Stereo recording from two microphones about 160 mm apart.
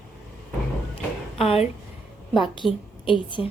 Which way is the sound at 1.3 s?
40° left (ahead or behind).